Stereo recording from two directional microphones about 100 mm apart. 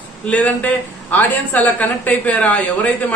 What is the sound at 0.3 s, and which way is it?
A woman's voice, 15° left (ahead or behind).